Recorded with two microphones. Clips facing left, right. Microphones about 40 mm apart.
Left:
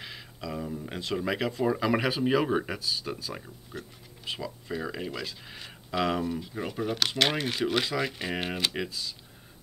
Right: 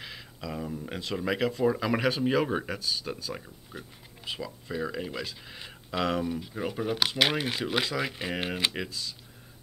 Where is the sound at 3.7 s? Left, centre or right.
Centre.